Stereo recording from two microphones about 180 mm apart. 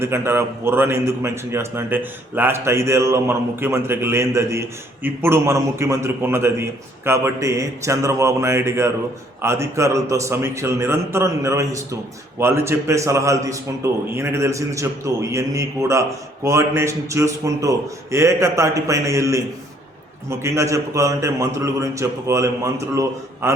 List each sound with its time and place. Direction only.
0.0 s a man's voice: 15° right (ahead or behind)